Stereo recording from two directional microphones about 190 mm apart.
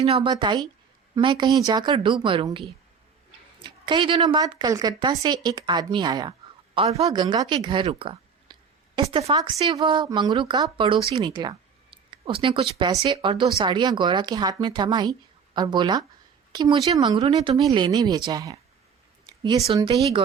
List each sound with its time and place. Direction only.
0.0 s speech: 30° right (ahead or behind)
6.7 s speech: 35° right (ahead or behind)
11.3 s a sound: 25° right (ahead or behind)
13.0 s speech: 25° right (ahead or behind)